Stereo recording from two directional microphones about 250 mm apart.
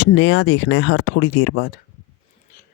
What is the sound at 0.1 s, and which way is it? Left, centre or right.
Speech, left.